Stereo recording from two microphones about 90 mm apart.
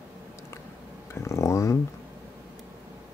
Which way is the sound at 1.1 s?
35° left (ahead or behind).